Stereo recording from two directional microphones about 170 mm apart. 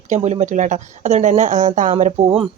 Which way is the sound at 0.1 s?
40° right (ahead or behind).